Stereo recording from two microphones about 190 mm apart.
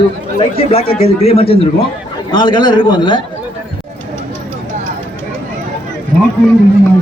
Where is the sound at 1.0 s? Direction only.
30° left (ahead or behind).